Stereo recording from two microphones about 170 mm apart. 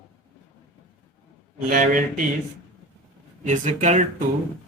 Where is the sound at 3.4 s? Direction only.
45° right (ahead or behind).